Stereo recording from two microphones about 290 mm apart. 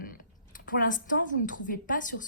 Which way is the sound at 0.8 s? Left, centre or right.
Left.